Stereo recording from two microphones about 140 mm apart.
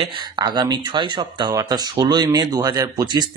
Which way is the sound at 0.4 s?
30° right (ahead or behind).